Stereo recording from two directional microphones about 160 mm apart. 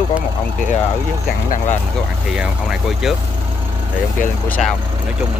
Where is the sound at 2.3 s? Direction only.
5° right (ahead or behind).